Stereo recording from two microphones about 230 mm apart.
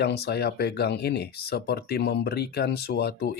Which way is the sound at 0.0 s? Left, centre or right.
Left.